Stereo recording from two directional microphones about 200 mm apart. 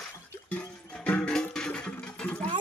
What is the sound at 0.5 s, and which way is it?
Music, 5° left (ahead or behind).